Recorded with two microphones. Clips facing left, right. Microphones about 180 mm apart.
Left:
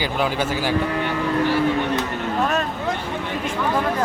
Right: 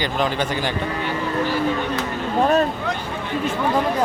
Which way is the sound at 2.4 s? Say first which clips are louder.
Right 6 dB; 35° right (ahead or behind).